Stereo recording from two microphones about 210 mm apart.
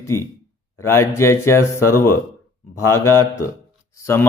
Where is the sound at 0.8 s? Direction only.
10° left (ahead or behind).